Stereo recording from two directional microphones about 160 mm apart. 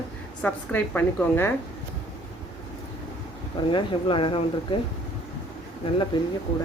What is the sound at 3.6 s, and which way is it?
Speech, 35° left (ahead or behind).